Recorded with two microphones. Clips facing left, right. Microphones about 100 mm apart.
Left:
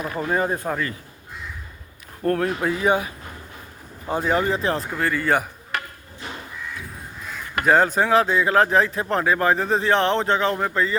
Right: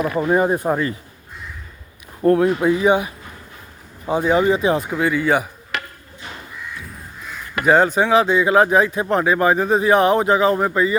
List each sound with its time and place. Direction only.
0.2 s speech: 20° right (ahead or behind)
2.2 s speech: 15° right (ahead or behind)
4.1 s speech: 5° right (ahead or behind)
5.7 s a sound: 90° right
7.6 s speech: centre (ahead or behind)